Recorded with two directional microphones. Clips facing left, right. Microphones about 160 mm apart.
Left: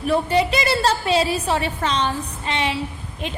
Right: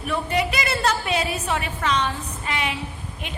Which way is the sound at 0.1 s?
30° left (ahead or behind).